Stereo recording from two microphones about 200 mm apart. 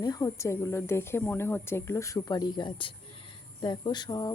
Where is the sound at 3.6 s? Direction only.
20° left (ahead or behind).